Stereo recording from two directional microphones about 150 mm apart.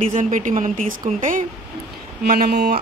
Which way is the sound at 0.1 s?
60° right (ahead or behind).